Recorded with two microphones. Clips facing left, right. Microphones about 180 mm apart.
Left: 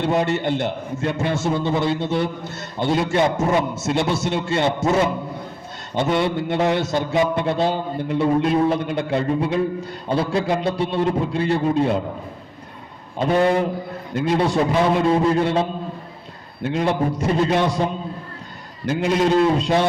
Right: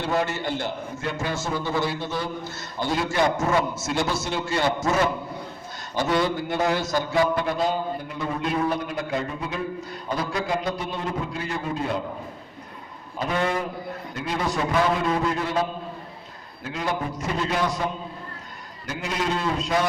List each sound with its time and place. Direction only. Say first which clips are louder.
0.0 s a man's voice: left 5 dB; 20° left (ahead or behind)
13.1 s a man's voice: left 8 dB; 30° left (ahead or behind)
16.6 s a man's voice: left 8 dB; 30° left (ahead or behind)
18.9 s a man's voice: left 9 dB; 30° left (ahead or behind)